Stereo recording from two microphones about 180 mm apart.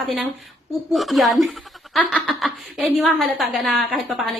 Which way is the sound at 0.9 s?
Centre (ahead or behind).